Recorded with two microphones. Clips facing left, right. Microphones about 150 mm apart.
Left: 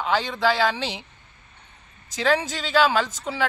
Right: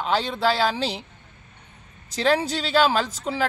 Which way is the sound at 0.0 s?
35° right (ahead or behind).